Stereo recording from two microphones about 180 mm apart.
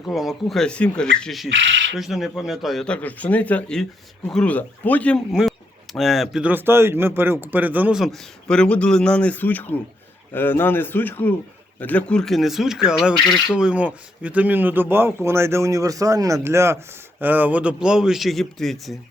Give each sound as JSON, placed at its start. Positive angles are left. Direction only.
{"t": 0.1, "sound": "speech", "side_deg": 0}
{"t": 1.5, "sound": "speech", "side_deg": -90}
{"t": 2.0, "sound": "a man's voice", "side_deg": 0}